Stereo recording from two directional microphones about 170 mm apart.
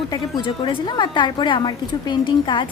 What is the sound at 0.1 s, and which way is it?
A woman's voice, 25° left (ahead or behind).